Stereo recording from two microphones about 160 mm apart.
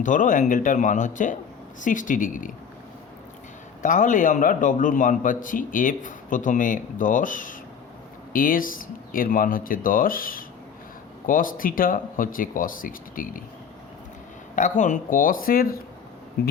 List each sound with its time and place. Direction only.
0.0 s a man's voice: 55° left (ahead or behind)
3.8 s a man's voice: 55° left (ahead or behind)
14.5 s a man's voice: 50° left (ahead or behind)